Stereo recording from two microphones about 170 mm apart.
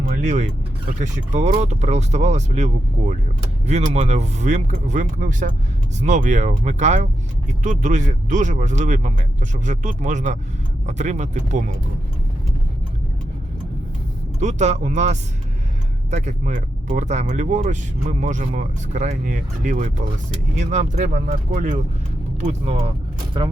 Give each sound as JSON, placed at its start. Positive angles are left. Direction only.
{"t": 0.2, "sound": "speech", "side_deg": -45}
{"t": 14.3, "sound": "speech", "side_deg": -45}
{"t": 22.4, "sound": "speech", "side_deg": -40}
{"t": 23.3, "sound": "speech", "side_deg": -25}